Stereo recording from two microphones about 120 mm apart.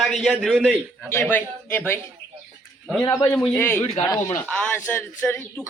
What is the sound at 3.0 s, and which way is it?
Speech, 40° left (ahead or behind).